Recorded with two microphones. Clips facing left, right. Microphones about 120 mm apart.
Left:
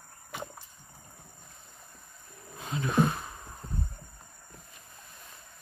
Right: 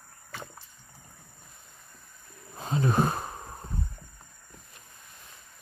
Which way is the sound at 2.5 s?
35° right (ahead or behind).